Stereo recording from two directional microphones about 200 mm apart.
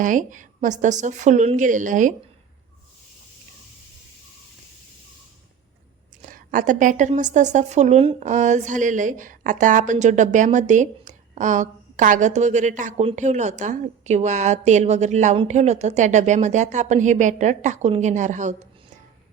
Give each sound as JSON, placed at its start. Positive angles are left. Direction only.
{"t": 0.0, "sound": "a woman's voice", "side_deg": -40}
{"t": 6.2, "sound": "a woman's voice", "side_deg": -40}